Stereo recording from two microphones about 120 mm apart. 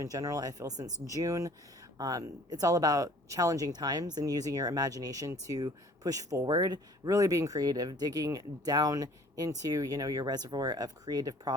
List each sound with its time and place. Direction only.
0.0 s speech: 30° right (ahead or behind)